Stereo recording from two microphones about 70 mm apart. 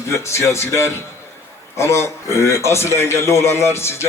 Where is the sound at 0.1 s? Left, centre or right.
Left.